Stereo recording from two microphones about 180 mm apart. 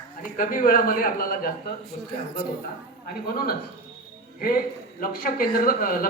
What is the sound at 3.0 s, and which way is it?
Speech, 55° left (ahead or behind).